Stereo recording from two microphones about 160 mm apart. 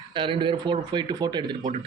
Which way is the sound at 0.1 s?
30° right (ahead or behind).